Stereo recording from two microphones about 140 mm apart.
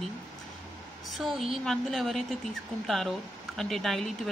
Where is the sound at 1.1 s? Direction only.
Centre (ahead or behind).